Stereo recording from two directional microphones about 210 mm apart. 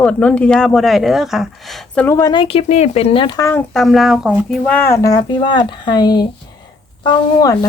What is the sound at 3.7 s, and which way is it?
Speech, centre (ahead or behind).